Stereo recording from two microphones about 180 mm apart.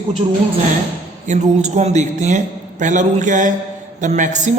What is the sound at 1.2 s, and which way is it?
A man's voice, 40° right (ahead or behind).